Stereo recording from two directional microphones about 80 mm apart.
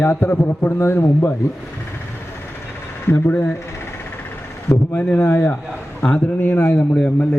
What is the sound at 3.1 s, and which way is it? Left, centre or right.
Speech, left.